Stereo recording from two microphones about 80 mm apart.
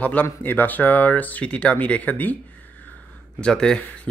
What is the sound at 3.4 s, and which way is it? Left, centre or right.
Speech, centre.